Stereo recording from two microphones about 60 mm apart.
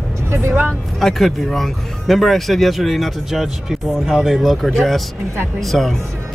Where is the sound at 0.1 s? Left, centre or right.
Right.